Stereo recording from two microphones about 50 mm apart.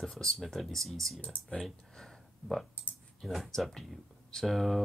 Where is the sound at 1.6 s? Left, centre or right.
Centre.